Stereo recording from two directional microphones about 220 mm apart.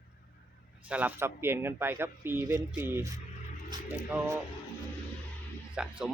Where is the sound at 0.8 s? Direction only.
5° right (ahead or behind).